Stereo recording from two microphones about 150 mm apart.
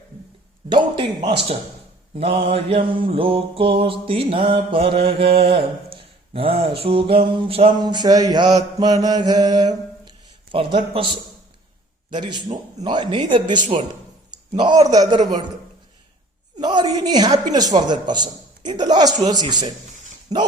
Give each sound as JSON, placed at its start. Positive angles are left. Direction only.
{"t": 0.7, "sound": "a sound", "side_deg": -30}
{"t": 2.1, "sound": "mantra", "side_deg": -35}
{"t": 16.6, "sound": "mantra", "side_deg": -30}